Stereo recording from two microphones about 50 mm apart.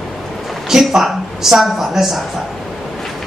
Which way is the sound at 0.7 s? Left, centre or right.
Centre.